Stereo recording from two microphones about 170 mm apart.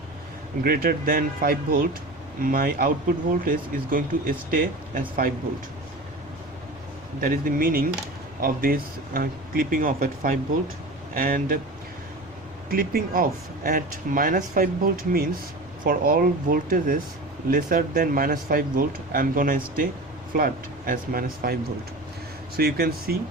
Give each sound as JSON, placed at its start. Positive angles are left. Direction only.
{"t": 0.6, "sound": "speech", "side_deg": -60}
{"t": 7.2, "sound": "speech", "side_deg": -55}
{"t": 12.7, "sound": "speech", "side_deg": -60}